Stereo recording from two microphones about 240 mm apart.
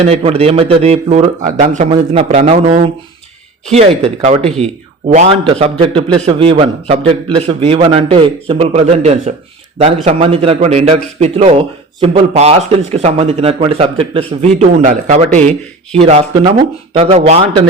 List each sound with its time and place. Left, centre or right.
0.0 s a man's voice: right